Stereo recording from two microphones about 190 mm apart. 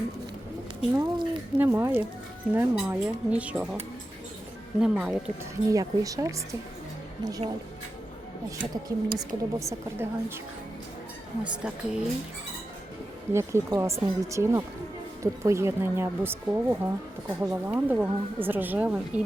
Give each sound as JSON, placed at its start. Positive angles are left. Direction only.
{"t": 0.9, "sound": "speech", "side_deg": -25}
{"t": 1.5, "sound": "speech", "side_deg": -10}
{"t": 4.8, "sound": "speech", "side_deg": -5}
{"t": 5.7, "sound": "speech", "side_deg": -20}
{"t": 8.7, "sound": "speech", "side_deg": -15}
{"t": 11.6, "sound": "speech", "side_deg": -5}
{"t": 13.3, "sound": "speech", "side_deg": -15}